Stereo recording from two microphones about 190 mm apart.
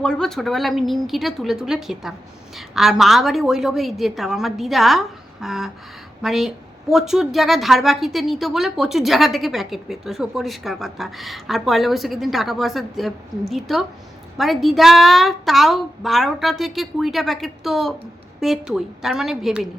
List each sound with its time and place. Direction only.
0.0 s a woman's voice: 5° left (ahead or behind)